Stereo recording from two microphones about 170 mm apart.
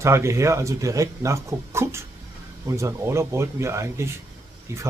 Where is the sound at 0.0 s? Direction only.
15° right (ahead or behind).